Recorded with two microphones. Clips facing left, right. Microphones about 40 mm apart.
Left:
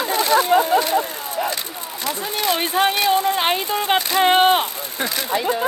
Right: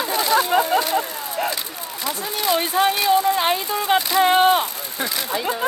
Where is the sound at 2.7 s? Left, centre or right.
Left.